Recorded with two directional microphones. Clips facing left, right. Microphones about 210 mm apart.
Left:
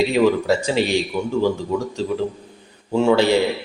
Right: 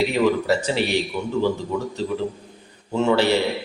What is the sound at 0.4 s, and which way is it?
A man's voice, 15° left (ahead or behind).